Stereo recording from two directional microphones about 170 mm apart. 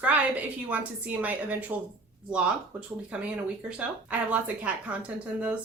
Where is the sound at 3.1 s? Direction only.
5° right (ahead or behind).